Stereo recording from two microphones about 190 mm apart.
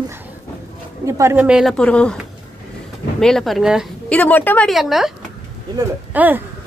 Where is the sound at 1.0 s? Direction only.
15° right (ahead or behind).